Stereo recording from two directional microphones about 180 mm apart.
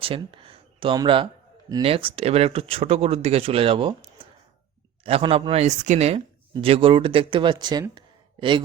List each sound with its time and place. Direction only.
0.0 s speech: 30° right (ahead or behind)